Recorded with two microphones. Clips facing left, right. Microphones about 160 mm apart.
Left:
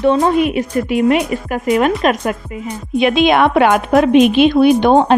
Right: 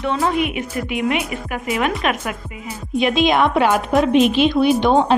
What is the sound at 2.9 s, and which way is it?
A woman's voice, 65° left (ahead or behind).